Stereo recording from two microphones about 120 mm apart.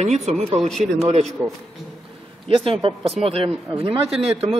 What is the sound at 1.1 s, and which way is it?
Speech, 70° right (ahead or behind).